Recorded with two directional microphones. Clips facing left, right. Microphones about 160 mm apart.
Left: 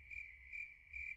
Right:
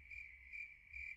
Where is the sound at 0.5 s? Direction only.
20° left (ahead or behind).